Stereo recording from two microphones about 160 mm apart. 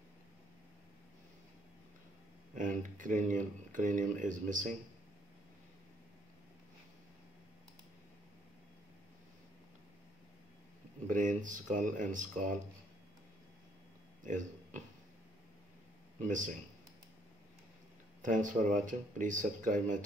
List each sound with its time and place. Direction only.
2.5 s speech: 55° right (ahead or behind)
11.1 s speech: 55° right (ahead or behind)
14.2 s speech: 50° right (ahead or behind)
16.3 s speech: 55° right (ahead or behind)
18.2 s speech: 55° right (ahead or behind)